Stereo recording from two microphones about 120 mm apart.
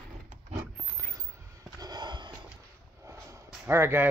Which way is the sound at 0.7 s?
25° right (ahead or behind).